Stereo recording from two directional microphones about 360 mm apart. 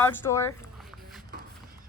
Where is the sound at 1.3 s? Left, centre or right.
Right.